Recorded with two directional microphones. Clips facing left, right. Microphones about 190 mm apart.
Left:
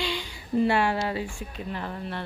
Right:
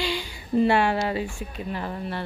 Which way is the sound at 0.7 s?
80° right.